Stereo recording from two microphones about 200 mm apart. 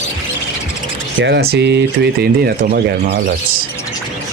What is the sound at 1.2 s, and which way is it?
Speech, 55° right (ahead or behind).